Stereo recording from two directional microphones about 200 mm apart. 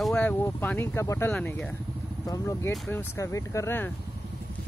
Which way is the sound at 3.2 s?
15° left (ahead or behind).